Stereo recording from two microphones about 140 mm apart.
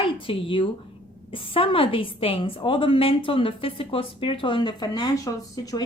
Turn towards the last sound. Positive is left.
turn(degrees=25)  # may be behind; listen again after turning